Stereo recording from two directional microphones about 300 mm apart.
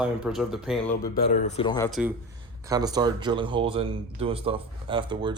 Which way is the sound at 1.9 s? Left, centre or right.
Centre.